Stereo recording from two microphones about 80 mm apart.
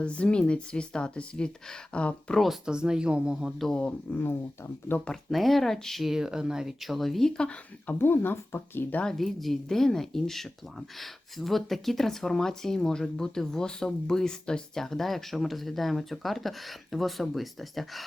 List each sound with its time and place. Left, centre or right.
0.0 s speech: centre
2.4 s speech: centre
3.6 s speech: centre
4.1 s speech: left
5.0 s speech: centre
7.9 s speech: left
9.0 s speech: centre